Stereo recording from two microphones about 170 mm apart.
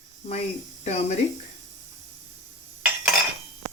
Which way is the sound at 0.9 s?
40° left (ahead or behind).